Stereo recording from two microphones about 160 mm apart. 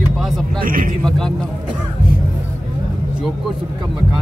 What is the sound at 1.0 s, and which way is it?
Speech, 5° left (ahead or behind).